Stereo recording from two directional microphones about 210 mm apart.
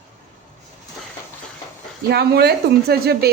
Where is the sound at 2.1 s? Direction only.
50° right (ahead or behind).